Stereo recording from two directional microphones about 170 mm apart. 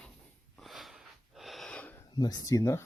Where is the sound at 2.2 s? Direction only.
25° left (ahead or behind).